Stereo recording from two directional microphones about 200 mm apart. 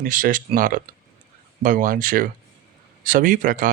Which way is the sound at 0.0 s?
45° right (ahead or behind).